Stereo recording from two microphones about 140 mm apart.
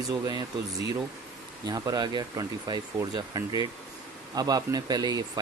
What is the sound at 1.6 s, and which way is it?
Speech, 25° right (ahead or behind).